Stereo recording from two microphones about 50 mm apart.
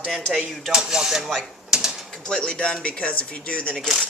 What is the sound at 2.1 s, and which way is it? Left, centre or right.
Speech, centre.